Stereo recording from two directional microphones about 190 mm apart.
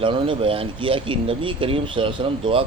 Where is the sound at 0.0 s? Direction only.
25° right (ahead or behind).